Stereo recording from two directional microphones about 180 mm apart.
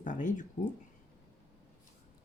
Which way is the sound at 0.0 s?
45° left (ahead or behind).